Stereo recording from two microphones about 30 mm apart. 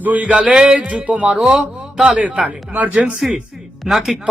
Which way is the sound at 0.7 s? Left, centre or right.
Right.